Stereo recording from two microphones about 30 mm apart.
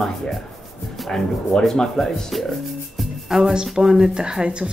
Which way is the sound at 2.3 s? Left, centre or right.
Centre.